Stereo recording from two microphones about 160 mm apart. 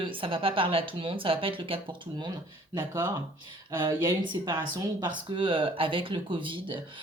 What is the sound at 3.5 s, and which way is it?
Speech, 30° right (ahead or behind).